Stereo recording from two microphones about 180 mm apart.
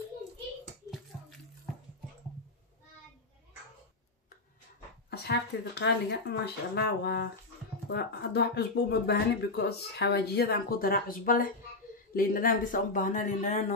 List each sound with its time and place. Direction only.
5.1 s speech: 65° left (ahead or behind); by 13.6 s 40° left (ahead or behind)